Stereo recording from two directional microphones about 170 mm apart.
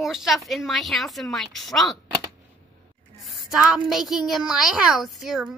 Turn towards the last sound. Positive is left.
turn(degrees=0)  # may be behind; listen again after turning